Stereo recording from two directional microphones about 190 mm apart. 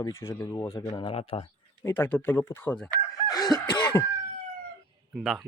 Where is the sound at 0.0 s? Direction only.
15° left (ahead or behind); by 1.5 s 30° left (ahead or behind).